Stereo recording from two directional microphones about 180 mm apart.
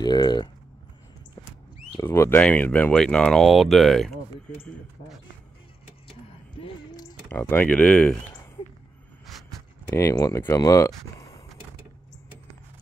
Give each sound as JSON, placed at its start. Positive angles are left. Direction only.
{"t": 0.0, "sound": "speech", "side_deg": 25}
{"t": 2.0, "sound": "speech", "side_deg": 15}
{"t": 6.6, "sound": "a sound", "side_deg": 25}
{"t": 7.2, "sound": "speech", "side_deg": 10}
{"t": 9.8, "sound": "speech", "side_deg": 15}